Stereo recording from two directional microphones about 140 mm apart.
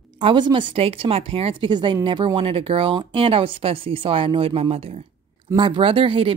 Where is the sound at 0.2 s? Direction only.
35° right (ahead or behind).